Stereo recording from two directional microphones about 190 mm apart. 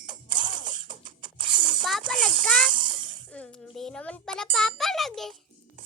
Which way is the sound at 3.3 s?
5° left (ahead or behind).